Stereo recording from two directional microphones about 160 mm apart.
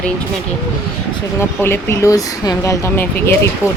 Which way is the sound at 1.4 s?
15° left (ahead or behind).